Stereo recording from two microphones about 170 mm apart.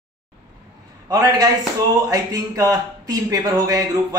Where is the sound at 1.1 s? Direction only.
20° right (ahead or behind).